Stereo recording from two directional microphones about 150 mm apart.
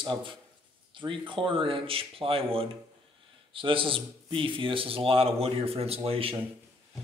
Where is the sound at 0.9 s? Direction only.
35° right (ahead or behind).